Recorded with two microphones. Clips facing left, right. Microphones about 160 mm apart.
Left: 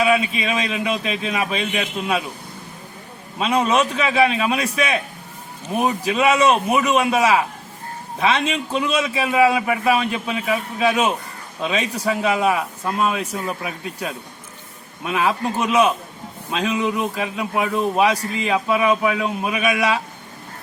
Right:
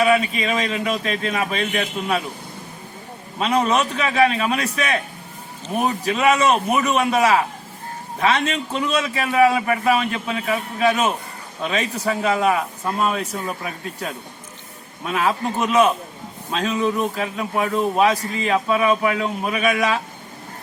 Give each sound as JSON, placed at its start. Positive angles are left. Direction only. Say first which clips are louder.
{"t": 0.0, "sound": "a man's voice", "louder": "right 1 dB", "side_deg": 10}
{"t": 3.3, "sound": "a man's voice", "louder": "left 1 dB", "side_deg": 10}
{"t": 15.0, "sound": "a man's voice", "louder": "left 1 dB", "side_deg": 10}